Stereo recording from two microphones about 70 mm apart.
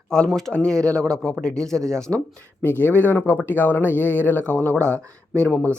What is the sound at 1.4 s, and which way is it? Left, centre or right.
Speech, centre.